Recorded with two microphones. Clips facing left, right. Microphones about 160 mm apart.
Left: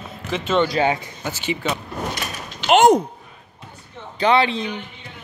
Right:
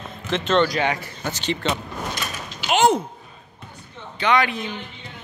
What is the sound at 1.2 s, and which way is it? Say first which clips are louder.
Speech: even; 10° left (ahead or behind).